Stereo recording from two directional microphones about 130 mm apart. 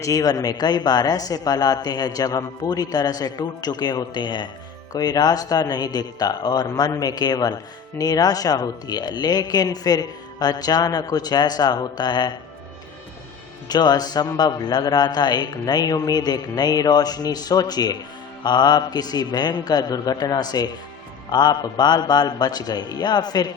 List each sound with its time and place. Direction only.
0.0 s a man's voice: 25° left (ahead or behind)
13.7 s a man's voice: 30° left (ahead or behind)